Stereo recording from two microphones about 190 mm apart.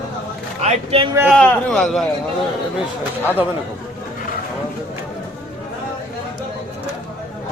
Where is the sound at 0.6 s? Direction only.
30° right (ahead or behind).